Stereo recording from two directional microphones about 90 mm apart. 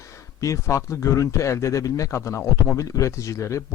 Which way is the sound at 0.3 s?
35° left (ahead or behind).